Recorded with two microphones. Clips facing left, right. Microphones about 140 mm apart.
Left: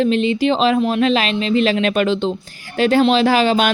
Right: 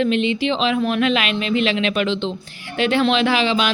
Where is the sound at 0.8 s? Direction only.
30° left (ahead or behind).